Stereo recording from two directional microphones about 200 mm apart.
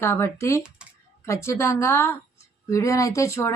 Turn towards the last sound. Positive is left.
turn(degrees=15)  # may be behind; listen again after turning